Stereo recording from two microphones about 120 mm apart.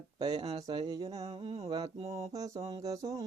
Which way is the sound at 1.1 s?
60° right (ahead or behind).